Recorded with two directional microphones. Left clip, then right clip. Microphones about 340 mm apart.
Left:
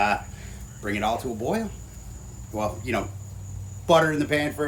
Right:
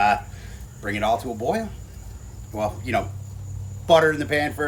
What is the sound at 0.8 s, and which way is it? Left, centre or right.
Speech, centre.